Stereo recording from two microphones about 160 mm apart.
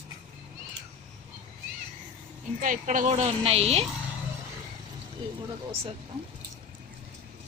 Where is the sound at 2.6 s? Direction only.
55° right (ahead or behind); by 3.8 s 40° right (ahead or behind).